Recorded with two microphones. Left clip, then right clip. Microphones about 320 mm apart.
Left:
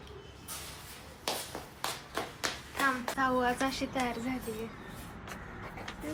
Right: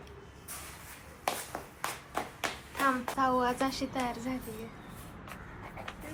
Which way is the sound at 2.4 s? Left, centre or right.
Centre.